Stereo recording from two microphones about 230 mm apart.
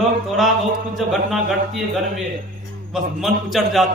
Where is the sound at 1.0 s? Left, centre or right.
Centre.